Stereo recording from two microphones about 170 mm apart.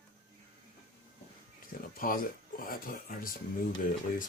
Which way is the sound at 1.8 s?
55° left (ahead or behind).